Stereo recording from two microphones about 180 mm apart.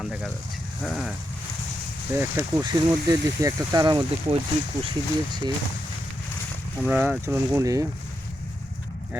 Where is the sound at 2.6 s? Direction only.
20° right (ahead or behind).